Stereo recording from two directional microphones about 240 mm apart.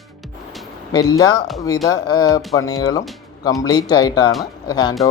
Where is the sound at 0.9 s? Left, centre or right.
Centre.